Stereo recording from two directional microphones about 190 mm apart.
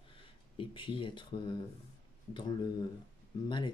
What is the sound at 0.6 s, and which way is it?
Speech, 25° left (ahead or behind).